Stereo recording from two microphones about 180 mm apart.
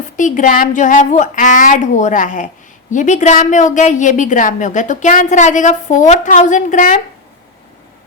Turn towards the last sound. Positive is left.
turn(degrees=50)  # may be behind; listen again after turning